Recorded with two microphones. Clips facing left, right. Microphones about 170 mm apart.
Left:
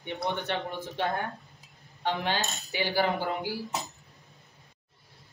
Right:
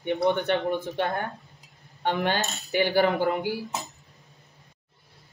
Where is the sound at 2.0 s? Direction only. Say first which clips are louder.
Right 4 dB; 55° right (ahead or behind).